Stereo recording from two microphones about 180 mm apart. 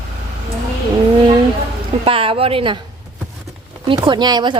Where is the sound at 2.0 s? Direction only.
30° right (ahead or behind).